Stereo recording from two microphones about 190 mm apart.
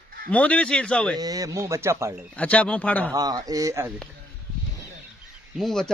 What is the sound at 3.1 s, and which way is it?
Speech, 20° right (ahead or behind).